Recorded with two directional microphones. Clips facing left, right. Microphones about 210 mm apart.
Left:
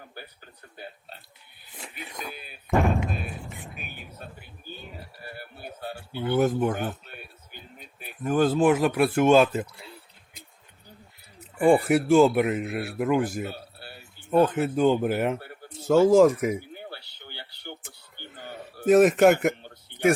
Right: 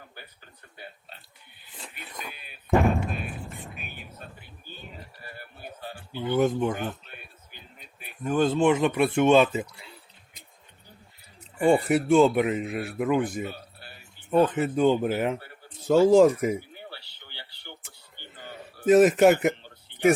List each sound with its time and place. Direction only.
1.7 s music: 10° left (ahead or behind)
2.6 s a sound: centre (ahead or behind)
6.1 s speech: 10° left (ahead or behind)
8.2 s speech: 5° left (ahead or behind)
11.6 s speech: 5° left (ahead or behind)
16.7 s a sound: 50° left (ahead or behind)
18.9 s speech: centre (ahead or behind)